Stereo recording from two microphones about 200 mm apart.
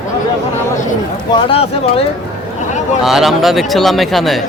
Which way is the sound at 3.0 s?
Centre (ahead or behind).